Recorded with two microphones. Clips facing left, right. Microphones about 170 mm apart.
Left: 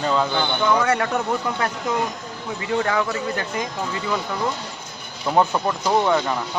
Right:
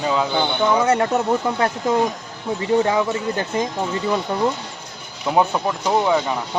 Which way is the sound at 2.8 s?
20° right (ahead or behind).